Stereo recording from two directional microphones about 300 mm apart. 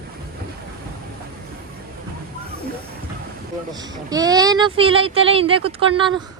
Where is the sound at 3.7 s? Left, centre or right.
Centre.